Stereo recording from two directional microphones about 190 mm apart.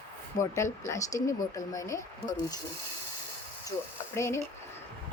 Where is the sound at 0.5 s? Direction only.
15° left (ahead or behind).